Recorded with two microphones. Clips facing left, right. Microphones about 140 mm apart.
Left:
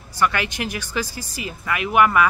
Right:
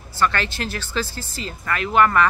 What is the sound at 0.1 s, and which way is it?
Speech, 15° left (ahead or behind).